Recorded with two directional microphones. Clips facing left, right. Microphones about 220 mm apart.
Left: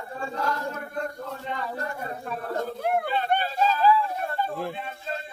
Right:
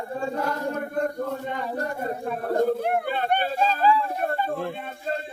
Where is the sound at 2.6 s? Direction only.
50° right (ahead or behind).